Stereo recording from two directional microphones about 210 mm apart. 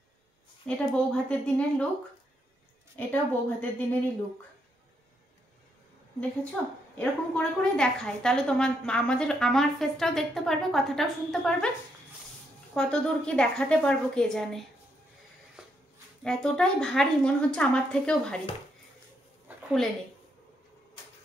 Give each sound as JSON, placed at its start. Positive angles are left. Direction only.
{"t": 0.7, "sound": "a woman's voice", "side_deg": 5}
{"t": 3.1, "sound": "a woman's voice", "side_deg": 10}
{"t": 6.5, "sound": "a woman's voice", "side_deg": 5}
{"t": 12.7, "sound": "a woman's voice", "side_deg": 5}
{"t": 16.3, "sound": "a woman's voice", "side_deg": 5}
{"t": 19.4, "sound": "a sound", "side_deg": 0}